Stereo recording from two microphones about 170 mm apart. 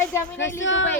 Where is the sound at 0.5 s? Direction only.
90° left.